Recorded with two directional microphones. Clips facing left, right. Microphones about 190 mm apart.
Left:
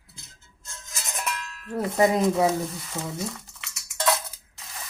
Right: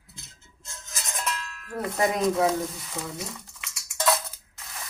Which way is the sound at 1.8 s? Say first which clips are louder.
Left 4 dB; 25° left (ahead or behind).